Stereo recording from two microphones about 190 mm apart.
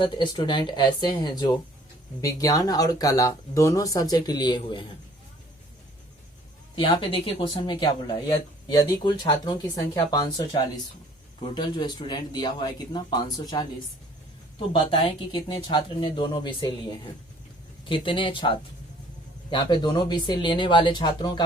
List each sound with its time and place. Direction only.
0.0 s speech: 25° left (ahead or behind)
6.7 s speech: 25° left (ahead or behind)
14.7 s speech: 25° left (ahead or behind)
17.8 s speech: 25° left (ahead or behind)